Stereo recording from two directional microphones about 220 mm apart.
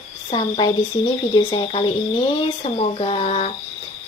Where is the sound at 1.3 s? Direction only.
20° left (ahead or behind).